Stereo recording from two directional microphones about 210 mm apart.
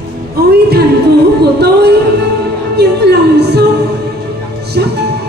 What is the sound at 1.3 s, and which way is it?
Music, 50° right (ahead or behind).